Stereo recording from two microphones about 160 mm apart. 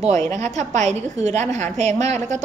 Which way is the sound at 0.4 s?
45° right (ahead or behind).